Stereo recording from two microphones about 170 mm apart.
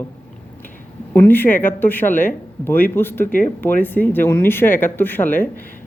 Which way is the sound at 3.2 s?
55° left (ahead or behind).